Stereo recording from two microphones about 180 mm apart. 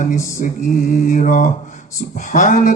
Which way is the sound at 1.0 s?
45° left (ahead or behind).